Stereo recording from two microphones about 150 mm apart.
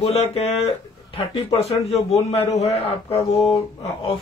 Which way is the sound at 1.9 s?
40° left (ahead or behind).